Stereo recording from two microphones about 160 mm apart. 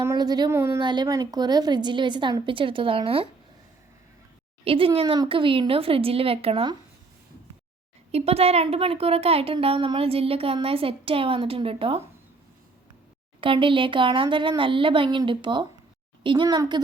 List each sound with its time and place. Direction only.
0.0 s a woman's voice: 20° right (ahead or behind)
0.8 s a woman's voice: 25° right (ahead or behind)
4.6 s a woman's voice: 35° right (ahead or behind)
8.1 s a woman's voice: 40° right (ahead or behind)
13.4 s a woman's voice: 30° right (ahead or behind)